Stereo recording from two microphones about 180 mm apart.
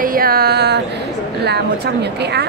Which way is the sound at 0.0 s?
55° right (ahead or behind).